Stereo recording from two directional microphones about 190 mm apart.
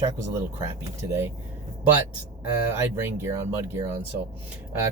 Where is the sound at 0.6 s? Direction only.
15° right (ahead or behind).